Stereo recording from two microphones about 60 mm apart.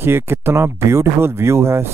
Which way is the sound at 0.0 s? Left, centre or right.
Right.